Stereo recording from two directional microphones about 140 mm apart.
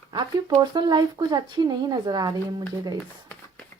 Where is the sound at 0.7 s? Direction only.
30° right (ahead or behind).